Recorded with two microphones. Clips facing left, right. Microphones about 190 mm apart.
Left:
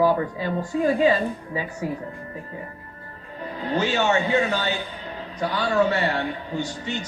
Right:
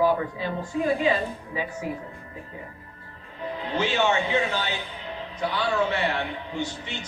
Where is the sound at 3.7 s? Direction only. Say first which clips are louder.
Left 2 dB; 40° left (ahead or behind).